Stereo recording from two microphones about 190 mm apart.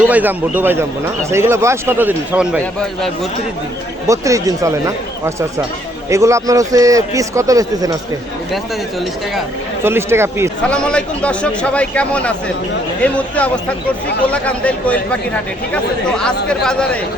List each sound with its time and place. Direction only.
0.1 s a man's voice: 10° right (ahead or behind)
4.1 s a man's voice: 15° right (ahead or behind)
8.5 s speech: centre (ahead or behind)
9.8 s a man's voice: 15° right (ahead or behind)
10.6 s speech: 5° left (ahead or behind)